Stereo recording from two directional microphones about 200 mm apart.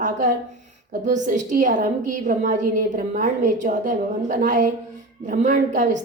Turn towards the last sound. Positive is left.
turn(degrees=-40)  # may be behind; listen again after turning